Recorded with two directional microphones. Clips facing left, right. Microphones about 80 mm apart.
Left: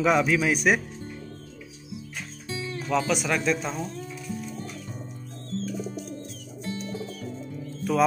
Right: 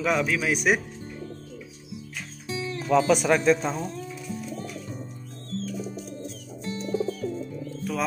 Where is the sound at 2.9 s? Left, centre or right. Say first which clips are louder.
Right 5 dB; right.